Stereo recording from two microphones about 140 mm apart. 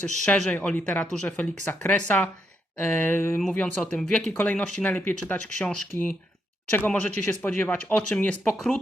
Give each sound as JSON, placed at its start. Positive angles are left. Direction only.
{"t": 0.0, "sound": "speech", "side_deg": 5}